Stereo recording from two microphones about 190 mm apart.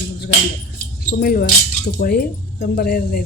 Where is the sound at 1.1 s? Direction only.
55° left (ahead or behind).